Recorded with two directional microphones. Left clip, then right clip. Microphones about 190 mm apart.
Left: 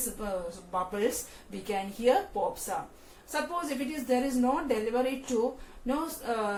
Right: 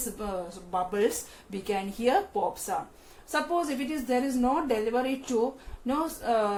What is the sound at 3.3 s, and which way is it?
A woman's voice, 50° right (ahead or behind).